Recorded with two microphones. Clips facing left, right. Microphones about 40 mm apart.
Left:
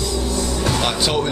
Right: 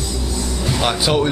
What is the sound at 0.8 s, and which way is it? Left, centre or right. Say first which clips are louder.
Speech: right 7 dB; centre.